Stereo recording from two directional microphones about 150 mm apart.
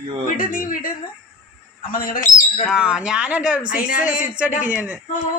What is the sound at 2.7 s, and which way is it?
A man's voice, 5° right (ahead or behind).